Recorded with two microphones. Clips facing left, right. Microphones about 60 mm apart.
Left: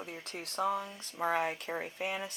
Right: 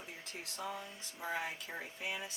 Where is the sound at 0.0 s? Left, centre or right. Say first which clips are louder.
Left 5 dB; left.